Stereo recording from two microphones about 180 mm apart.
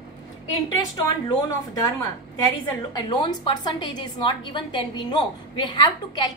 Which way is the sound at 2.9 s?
25° left (ahead or behind).